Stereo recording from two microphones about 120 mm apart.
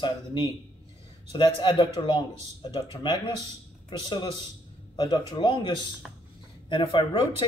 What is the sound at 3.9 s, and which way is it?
Speech, 40° left (ahead or behind).